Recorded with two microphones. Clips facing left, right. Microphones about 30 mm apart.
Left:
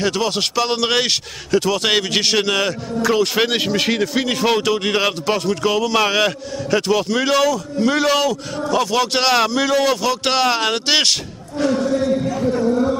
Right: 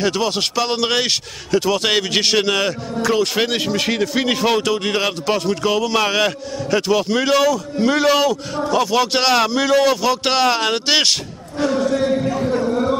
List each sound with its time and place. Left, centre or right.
0.0 s speech: centre
12.1 s a man's voice: right